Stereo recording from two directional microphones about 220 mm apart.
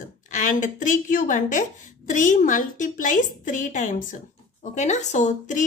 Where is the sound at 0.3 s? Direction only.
35° left (ahead or behind).